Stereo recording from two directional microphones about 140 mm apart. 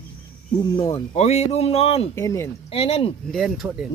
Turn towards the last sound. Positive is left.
turn(degrees=-5)  # may be behind; listen again after turning